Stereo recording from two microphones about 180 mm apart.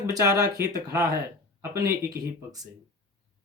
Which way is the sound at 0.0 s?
20° right (ahead or behind).